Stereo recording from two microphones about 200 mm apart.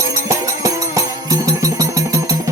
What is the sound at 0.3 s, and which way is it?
Music, 15° right (ahead or behind).